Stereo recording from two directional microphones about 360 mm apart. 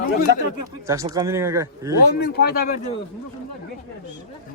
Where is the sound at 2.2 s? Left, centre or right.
Left.